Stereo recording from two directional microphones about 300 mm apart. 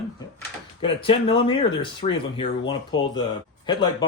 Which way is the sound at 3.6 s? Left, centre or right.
Centre.